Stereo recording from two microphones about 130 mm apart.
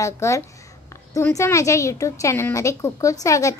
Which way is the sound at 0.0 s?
25° left (ahead or behind).